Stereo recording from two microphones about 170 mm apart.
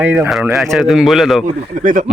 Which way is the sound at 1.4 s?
50° right (ahead or behind).